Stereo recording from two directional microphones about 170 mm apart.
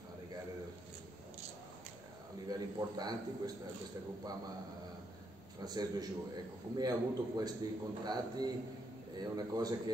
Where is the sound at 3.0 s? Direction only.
25° right (ahead or behind).